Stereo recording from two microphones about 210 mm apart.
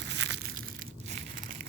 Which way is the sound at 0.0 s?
60° right (ahead or behind).